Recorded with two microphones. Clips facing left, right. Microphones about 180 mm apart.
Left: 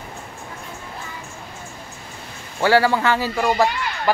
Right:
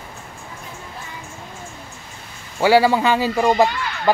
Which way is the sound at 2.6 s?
15° right (ahead or behind).